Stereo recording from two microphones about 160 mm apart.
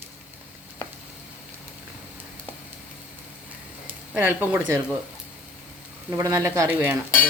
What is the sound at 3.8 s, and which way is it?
Speech, 10° right (ahead or behind).